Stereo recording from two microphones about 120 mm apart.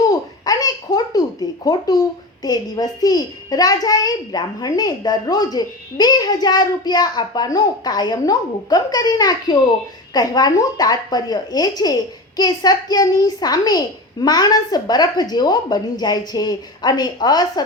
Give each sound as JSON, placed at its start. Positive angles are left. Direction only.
{"t": 0.0, "sound": "a child's voice", "side_deg": 30}